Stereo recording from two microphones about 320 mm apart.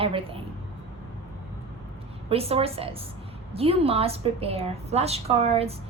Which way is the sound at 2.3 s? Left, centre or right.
Centre.